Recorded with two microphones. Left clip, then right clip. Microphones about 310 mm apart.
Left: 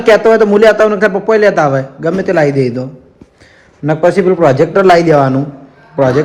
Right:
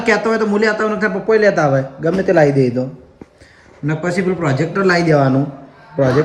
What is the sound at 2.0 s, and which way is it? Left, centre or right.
Speech, left.